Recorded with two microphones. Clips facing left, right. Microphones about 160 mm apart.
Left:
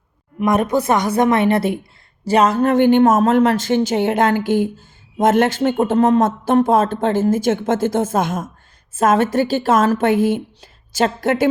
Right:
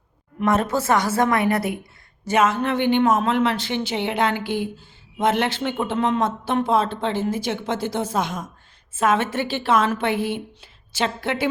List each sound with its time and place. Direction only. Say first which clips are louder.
0.3 s a woman's voice: left 4 dB; 15° left (ahead or behind); by 11.4 s 45° left (ahead or behind)